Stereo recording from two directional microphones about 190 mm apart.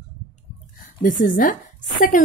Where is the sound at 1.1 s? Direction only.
45° left (ahead or behind).